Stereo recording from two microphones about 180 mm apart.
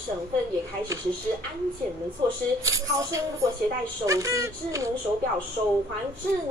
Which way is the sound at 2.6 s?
15° right (ahead or behind).